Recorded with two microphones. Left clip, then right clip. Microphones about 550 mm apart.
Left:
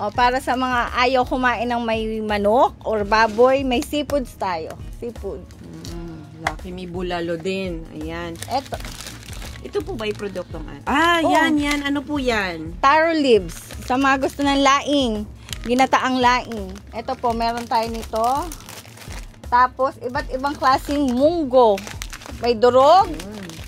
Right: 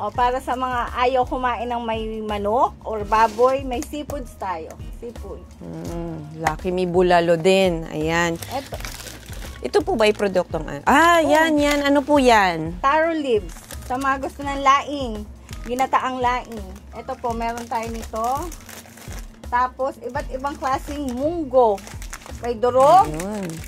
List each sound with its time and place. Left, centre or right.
0.0 s speech: left
6.6 s speech: centre
9.7 s speech: centre
12.8 s speech: left
19.5 s speech: left